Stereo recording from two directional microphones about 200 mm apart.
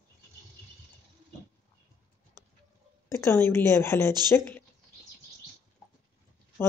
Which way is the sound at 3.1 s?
10° left (ahead or behind).